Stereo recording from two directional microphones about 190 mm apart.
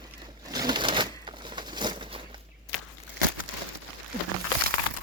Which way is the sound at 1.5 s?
25° right (ahead or behind).